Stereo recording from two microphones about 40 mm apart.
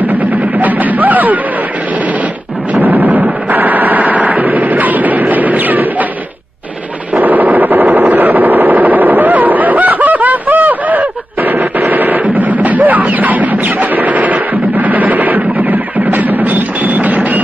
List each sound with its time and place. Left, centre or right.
0.1 s music: right
2.7 s machine gun: right
7.2 s a sound: right
11.8 s machine gun: right